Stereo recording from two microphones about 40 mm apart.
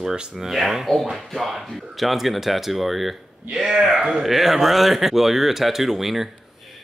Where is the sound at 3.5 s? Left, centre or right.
Centre.